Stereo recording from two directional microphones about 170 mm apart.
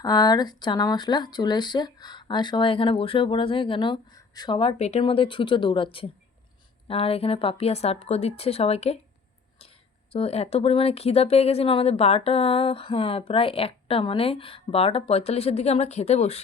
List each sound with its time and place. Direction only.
0.0 s speech: 25° left (ahead or behind)
10.1 s speech: 35° left (ahead or behind)